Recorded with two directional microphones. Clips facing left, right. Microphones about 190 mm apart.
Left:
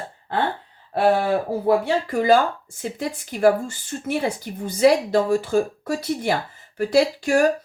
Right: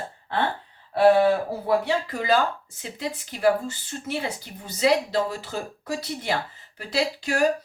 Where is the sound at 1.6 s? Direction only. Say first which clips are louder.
Left 3 dB; 50° left (ahead or behind).